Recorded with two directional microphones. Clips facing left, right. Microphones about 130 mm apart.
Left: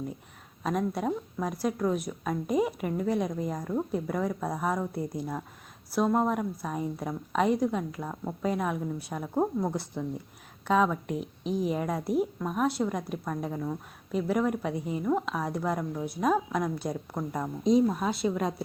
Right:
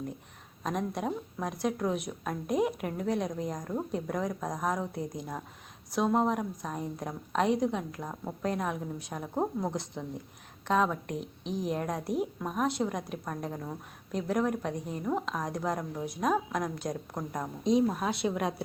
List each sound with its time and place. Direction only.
0.6 s a woman's voice: centre (ahead or behind)
11.2 s speech: 50° left (ahead or behind)
11.6 s a woman's voice: 5° left (ahead or behind)